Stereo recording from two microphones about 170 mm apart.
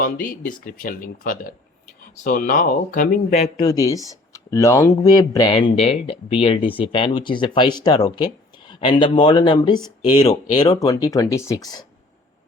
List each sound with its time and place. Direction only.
0.0 s speech: 55° left (ahead or behind)
3.6 s speech: 20° left (ahead or behind)